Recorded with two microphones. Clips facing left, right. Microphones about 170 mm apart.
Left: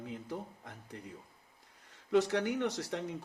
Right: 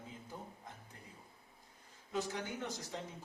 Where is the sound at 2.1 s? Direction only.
75° left (ahead or behind).